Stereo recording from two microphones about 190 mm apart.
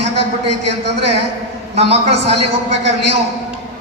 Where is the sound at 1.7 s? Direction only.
35° right (ahead or behind).